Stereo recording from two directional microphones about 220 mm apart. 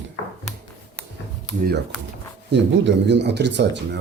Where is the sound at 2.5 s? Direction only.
55° right (ahead or behind).